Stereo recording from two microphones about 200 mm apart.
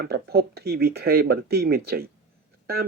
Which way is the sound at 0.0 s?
55° right (ahead or behind).